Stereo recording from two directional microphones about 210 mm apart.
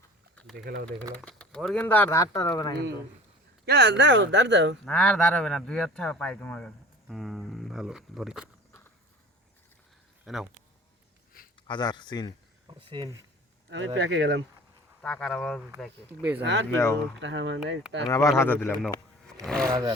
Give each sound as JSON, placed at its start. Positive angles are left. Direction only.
{"t": 0.5, "sound": "speech", "side_deg": -45}
{"t": 1.1, "sound": "speech", "side_deg": 5}
{"t": 3.7, "sound": "speech", "side_deg": -55}
{"t": 4.9, "sound": "speech", "side_deg": 5}
{"t": 10.2, "sound": "speech", "side_deg": 0}
{"t": 11.3, "sound": "a sound", "side_deg": 45}
{"t": 11.7, "sound": "speech", "side_deg": 20}
{"t": 12.6, "sound": "speech", "side_deg": -25}
{"t": 13.7, "sound": "speech", "side_deg": -60}
{"t": 15.0, "sound": "speech", "side_deg": 5}
{"t": 16.4, "sound": "speech", "side_deg": -60}
{"t": 16.7, "sound": "speech", "side_deg": 10}
{"t": 17.2, "sound": "speech", "side_deg": -60}
{"t": 18.0, "sound": "speech", "side_deg": 15}